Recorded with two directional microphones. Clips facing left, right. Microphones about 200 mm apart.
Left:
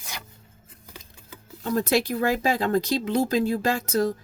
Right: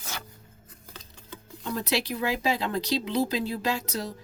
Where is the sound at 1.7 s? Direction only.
50° left (ahead or behind).